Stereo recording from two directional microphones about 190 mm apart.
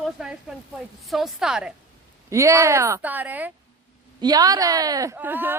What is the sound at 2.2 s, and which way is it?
A woman's voice, 15° right (ahead or behind).